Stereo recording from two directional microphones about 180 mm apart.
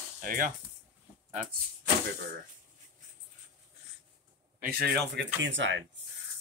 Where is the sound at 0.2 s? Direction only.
50° right (ahead or behind).